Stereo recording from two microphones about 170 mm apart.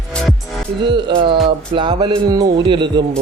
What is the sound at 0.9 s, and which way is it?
Speech, 25° right (ahead or behind).